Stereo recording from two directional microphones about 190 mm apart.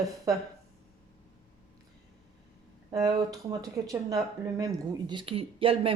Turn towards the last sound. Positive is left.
turn(degrees=-30)  # may be behind; listen again after turning